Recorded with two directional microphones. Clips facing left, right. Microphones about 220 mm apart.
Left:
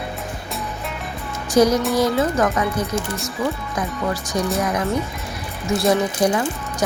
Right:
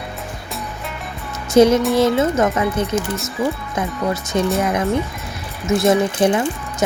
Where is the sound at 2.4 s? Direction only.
25° right (ahead or behind).